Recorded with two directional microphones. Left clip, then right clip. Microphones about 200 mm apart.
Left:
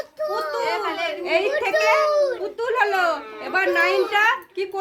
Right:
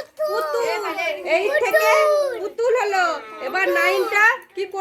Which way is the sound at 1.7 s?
55° right (ahead or behind).